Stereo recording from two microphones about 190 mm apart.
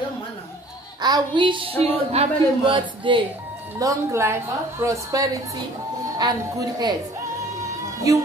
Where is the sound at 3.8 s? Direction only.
15° right (ahead or behind).